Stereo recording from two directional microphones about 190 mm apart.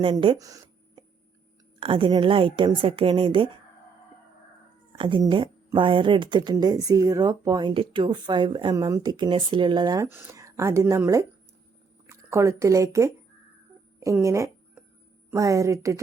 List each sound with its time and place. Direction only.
0.0 s speech: 25° right (ahead or behind)
4.9 s speech: 25° right (ahead or behind)
14.0 s a sound: 15° right (ahead or behind)
15.3 s a woman's voice: 15° right (ahead or behind)